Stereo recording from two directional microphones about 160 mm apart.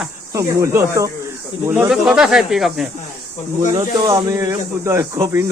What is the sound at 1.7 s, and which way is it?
Speech, 5° right (ahead or behind).